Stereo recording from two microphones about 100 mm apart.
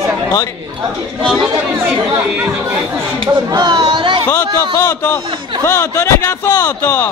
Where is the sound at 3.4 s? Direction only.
45° right (ahead or behind).